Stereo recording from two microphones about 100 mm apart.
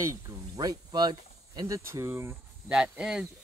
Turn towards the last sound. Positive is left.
turn(degrees=-10)  # may be behind; listen again after turning